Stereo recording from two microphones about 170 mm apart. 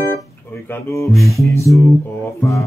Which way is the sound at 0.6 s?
15° left (ahead or behind).